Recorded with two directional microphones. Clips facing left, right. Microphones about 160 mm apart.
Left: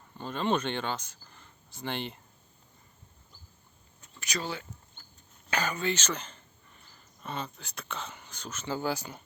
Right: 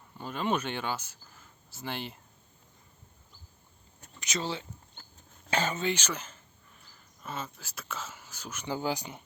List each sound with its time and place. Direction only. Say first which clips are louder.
0.2 s speech: left 2 dB; 10° right (ahead or behind)
4.2 s speech: right 1 dB; 20° right (ahead or behind)